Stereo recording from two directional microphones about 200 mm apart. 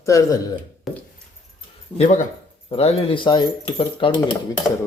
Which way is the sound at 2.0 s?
40° left (ahead or behind).